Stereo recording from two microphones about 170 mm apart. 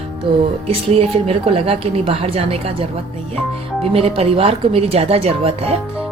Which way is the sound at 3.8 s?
35° right (ahead or behind).